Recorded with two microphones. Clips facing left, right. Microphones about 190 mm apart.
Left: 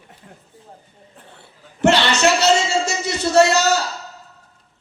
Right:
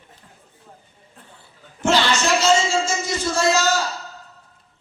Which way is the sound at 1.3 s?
70° left (ahead or behind).